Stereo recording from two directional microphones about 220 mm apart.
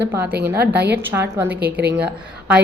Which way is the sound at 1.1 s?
10° right (ahead or behind).